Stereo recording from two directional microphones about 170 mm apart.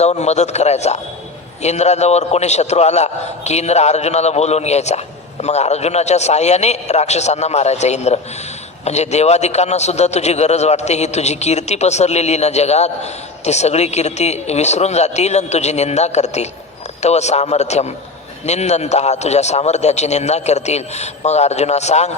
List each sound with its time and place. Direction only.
0.0 s a man's voice: 40° left (ahead or behind)